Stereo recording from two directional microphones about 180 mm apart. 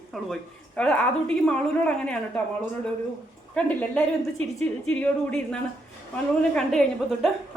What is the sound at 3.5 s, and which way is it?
A woman's voice, 5° left (ahead or behind).